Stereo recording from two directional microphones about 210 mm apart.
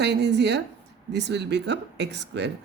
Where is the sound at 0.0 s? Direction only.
55° right (ahead or behind).